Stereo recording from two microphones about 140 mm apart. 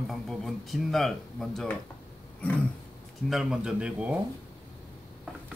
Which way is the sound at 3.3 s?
5° right (ahead or behind).